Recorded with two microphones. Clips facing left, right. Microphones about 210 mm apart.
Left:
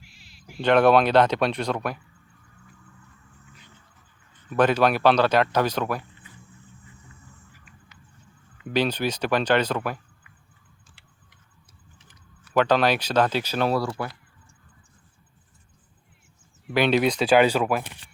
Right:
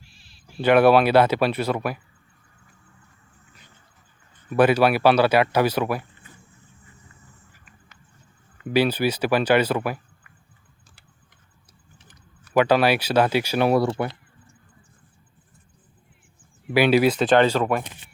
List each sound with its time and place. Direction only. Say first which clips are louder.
0.0 s cat: left 1 dB; 15° left (ahead or behind)
0.6 s speech: right 2 dB; 5° right (ahead or behind)
4.4 s speech: right 3 dB; 10° right (ahead or behind)
8.6 s speech: right 4 dB; 5° right (ahead or behind)
12.5 s speech: right 2 dB; 10° right (ahead or behind)
13.8 s speech: right 5 dB; 25° right (ahead or behind)
16.6 s speech: right 3 dB; 5° right (ahead or behind)
17.2 s speech: right 1 dB; 5° left (ahead or behind)